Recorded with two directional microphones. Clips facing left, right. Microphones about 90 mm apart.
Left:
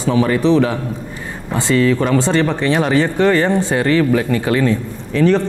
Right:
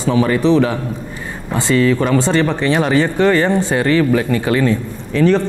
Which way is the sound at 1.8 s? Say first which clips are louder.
Even; 15° right (ahead or behind).